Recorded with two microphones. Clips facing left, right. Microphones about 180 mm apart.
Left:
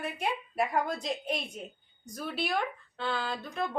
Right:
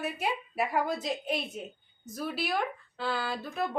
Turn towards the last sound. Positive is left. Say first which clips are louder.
# right 1 dB
turn(degrees=-5)  # may be behind; listen again after turning